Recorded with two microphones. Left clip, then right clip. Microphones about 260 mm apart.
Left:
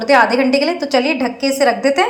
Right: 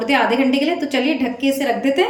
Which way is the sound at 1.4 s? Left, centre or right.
Left.